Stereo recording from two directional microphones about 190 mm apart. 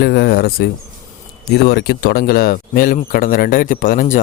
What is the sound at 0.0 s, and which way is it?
Speech, 55° left (ahead or behind).